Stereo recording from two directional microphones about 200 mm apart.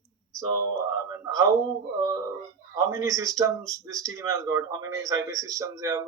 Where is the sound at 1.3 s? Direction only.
20° right (ahead or behind).